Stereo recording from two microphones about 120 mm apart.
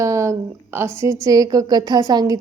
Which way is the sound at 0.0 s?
25° right (ahead or behind).